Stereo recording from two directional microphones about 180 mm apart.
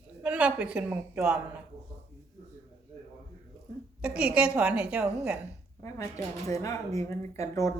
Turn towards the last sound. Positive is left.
turn(degrees=15)  # may be behind; listen again after turning